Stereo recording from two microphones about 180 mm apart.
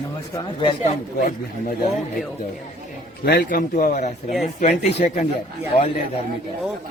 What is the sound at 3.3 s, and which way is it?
A man's voice, 60° left (ahead or behind).